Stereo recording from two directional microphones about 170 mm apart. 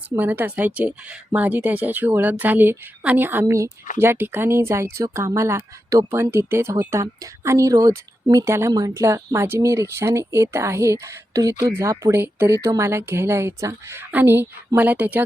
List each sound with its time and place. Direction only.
0.2 s speech: 10° right (ahead or behind)